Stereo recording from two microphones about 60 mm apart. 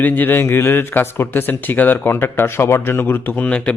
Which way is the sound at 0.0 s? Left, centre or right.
Left.